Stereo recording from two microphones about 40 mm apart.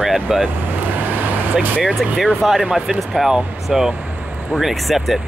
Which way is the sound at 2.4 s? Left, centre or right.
Centre.